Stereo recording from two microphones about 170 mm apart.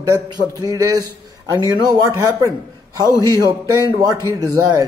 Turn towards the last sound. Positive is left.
turn(degrees=-20)  # may be behind; listen again after turning